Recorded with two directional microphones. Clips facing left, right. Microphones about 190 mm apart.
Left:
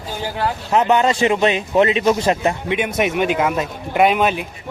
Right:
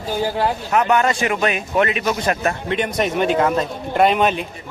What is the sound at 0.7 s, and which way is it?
A man's voice, 25° left (ahead or behind).